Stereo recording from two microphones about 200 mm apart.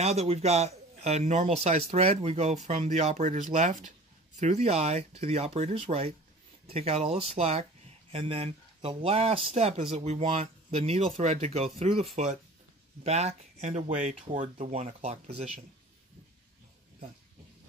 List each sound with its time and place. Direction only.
0.0 s speech: 30° right (ahead or behind)